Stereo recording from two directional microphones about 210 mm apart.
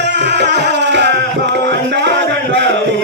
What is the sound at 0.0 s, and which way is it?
Music, 55° right (ahead or behind).